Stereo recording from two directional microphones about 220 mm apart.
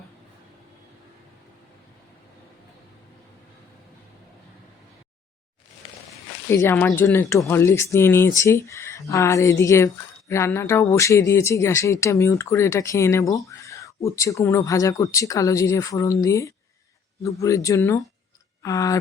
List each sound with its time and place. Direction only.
6.5 s speech: 10° left (ahead or behind)